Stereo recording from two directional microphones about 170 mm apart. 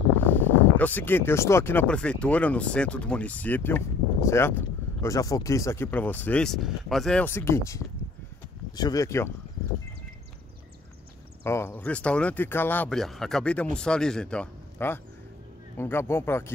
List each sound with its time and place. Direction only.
0.2 s speech: 10° left (ahead or behind)
11.4 s speech: 15° left (ahead or behind)